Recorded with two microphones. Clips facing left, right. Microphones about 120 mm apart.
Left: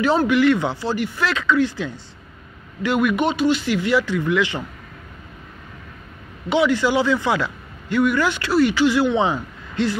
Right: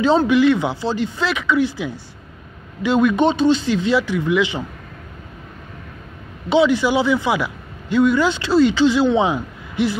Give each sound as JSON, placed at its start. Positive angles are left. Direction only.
{"t": 0.0, "sound": "a man's voice", "side_deg": -20}
{"t": 6.5, "sound": "speech", "side_deg": -20}